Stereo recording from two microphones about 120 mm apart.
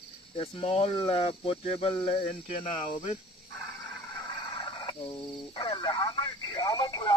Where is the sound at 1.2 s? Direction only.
50° left (ahead or behind).